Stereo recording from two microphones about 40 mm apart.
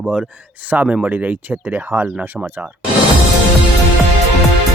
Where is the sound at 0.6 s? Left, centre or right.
Right.